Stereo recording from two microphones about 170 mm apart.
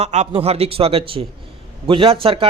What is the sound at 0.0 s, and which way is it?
A man's voice, 40° right (ahead or behind).